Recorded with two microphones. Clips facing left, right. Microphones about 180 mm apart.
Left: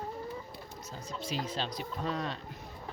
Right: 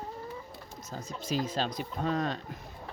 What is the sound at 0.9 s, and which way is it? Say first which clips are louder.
Speech: right 4 dB; 45° right (ahead or behind).